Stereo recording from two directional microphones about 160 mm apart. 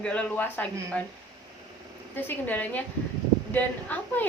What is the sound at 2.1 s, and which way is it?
A woman's voice, 10° left (ahead or behind).